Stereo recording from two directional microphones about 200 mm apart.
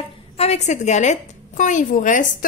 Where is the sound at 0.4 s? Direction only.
35° left (ahead or behind).